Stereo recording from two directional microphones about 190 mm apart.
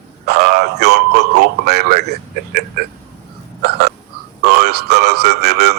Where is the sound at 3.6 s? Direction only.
55° right (ahead or behind).